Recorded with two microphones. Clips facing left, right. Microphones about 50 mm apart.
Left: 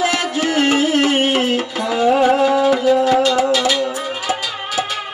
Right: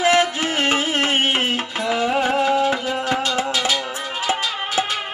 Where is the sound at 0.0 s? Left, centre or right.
Right.